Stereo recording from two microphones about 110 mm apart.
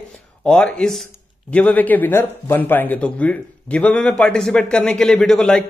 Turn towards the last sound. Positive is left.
turn(degrees=5)  # may be behind; listen again after turning